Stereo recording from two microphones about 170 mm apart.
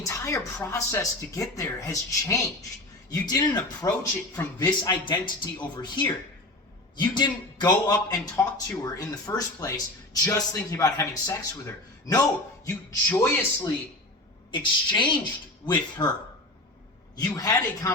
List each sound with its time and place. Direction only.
0.0 s a man's voice: 20° left (ahead or behind)
13.1 s a man's voice: 10° left (ahead or behind)
14.5 s a man's voice: 30° left (ahead or behind)
17.2 s a man's voice: 20° left (ahead or behind)